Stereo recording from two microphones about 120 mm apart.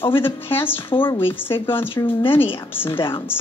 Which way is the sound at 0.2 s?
20° left (ahead or behind).